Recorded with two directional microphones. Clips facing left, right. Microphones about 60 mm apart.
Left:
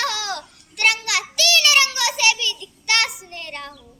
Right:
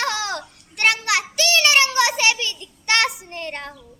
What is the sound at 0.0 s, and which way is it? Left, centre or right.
Child singing, right.